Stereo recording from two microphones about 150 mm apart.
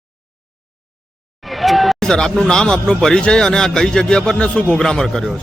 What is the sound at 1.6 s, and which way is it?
A man's voice, centre (ahead or behind).